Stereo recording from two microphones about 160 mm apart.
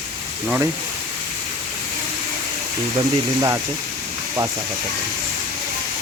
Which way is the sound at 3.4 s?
20° right (ahead or behind).